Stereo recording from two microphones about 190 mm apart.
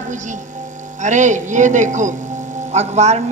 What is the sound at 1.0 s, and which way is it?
A woman's voice, 40° right (ahead or behind).